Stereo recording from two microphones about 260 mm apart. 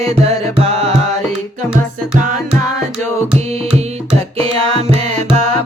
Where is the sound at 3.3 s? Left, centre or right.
Right.